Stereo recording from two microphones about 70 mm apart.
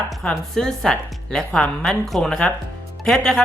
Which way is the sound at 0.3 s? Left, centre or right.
Centre.